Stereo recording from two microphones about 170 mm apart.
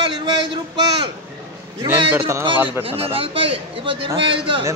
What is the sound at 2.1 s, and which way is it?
Speech, 15° right (ahead or behind).